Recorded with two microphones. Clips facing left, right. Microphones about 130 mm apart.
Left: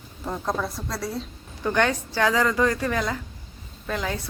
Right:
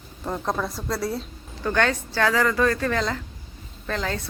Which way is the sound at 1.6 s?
15° left (ahead or behind).